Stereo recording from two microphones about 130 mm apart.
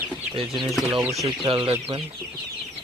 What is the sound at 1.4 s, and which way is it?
Speech, 40° right (ahead or behind).